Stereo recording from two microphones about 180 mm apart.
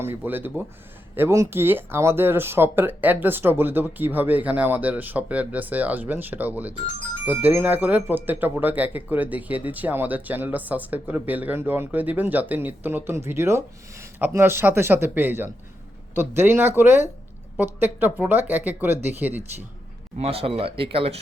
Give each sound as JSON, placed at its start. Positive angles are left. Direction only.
{"t": 0.0, "sound": "speech", "side_deg": -10}
{"t": 20.1, "sound": "speech", "side_deg": -35}